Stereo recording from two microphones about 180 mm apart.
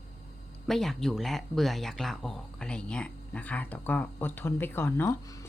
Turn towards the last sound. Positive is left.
turn(degrees=15)  # may be behind; listen again after turning